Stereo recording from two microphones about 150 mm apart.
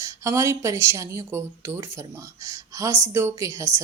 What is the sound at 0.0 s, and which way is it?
Speech, 20° right (ahead or behind).